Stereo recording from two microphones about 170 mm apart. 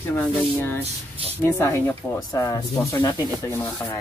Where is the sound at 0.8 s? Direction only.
35° right (ahead or behind).